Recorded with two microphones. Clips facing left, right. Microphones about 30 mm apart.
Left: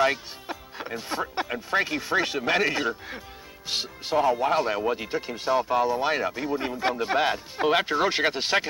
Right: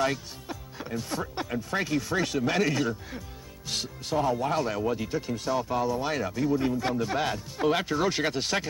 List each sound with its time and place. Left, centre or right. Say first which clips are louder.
0.0 s speech: left 4 dB; left